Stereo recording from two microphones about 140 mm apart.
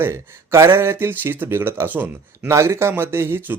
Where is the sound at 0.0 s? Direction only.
20° right (ahead or behind).